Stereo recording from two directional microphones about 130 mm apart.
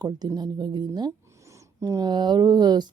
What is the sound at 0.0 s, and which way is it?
Speech, 30° right (ahead or behind).